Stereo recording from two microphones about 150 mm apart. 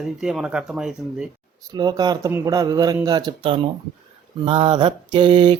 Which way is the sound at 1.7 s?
25° right (ahead or behind).